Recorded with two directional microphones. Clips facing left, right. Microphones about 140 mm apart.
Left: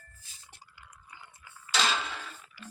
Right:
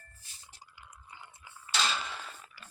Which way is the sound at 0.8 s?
20° right (ahead or behind).